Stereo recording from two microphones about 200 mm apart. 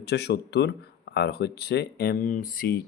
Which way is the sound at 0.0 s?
55° left (ahead or behind).